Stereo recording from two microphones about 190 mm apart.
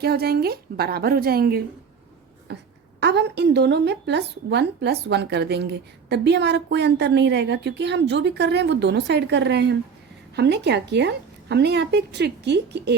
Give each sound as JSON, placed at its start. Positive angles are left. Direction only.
{"t": 0.0, "sound": "a woman's voice", "side_deg": -55}